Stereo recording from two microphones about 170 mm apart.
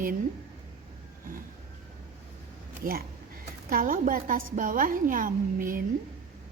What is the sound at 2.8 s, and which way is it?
A woman's voice, 55° right (ahead or behind).